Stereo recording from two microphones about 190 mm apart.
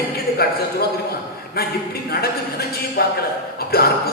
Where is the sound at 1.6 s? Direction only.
55° left (ahead or behind).